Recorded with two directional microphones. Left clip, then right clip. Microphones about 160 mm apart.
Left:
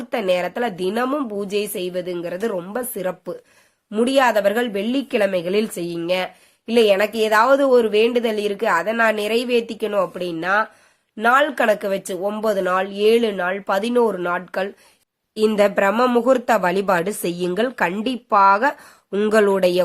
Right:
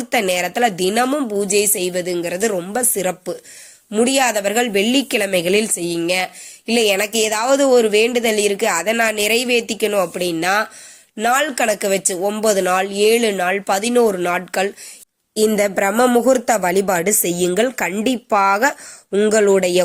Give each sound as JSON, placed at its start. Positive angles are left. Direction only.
{"t": 0.0, "sound": "speech", "side_deg": -5}
{"t": 15.4, "sound": "speech", "side_deg": -20}
{"t": 19.1, "sound": "speech", "side_deg": 0}